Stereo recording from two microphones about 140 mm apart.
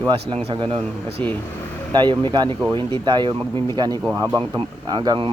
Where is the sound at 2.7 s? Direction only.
35° right (ahead or behind).